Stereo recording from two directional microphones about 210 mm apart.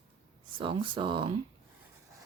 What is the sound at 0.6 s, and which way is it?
Speech, 25° right (ahead or behind).